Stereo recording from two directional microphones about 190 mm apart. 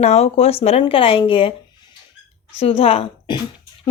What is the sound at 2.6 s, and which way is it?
Speech, 30° left (ahead or behind).